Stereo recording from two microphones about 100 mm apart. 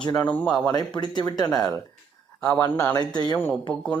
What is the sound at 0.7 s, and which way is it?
Speech, 45° left (ahead or behind).